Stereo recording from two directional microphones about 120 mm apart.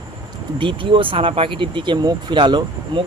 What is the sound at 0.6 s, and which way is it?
Speech, 45° right (ahead or behind).